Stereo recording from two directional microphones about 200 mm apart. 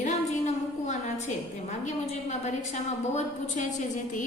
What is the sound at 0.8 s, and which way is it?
A woman's voice, 35° left (ahead or behind).